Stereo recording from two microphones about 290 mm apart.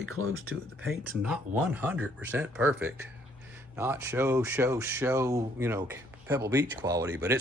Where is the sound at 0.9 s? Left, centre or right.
Centre.